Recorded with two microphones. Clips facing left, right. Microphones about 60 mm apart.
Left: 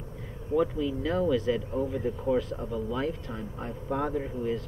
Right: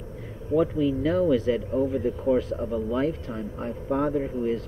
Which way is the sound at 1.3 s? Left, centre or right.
Right.